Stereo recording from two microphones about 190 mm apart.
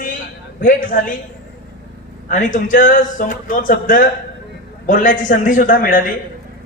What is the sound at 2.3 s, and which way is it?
Speech, 45° left (ahead or behind).